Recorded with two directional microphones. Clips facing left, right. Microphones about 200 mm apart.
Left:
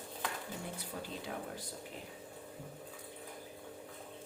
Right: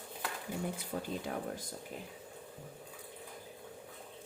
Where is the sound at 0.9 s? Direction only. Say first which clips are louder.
Right 5 dB; 40° right (ahead or behind).